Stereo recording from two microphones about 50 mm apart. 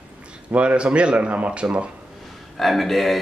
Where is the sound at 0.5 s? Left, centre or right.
Right.